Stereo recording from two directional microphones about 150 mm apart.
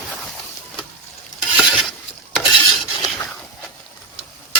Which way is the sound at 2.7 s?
Centre (ahead or behind).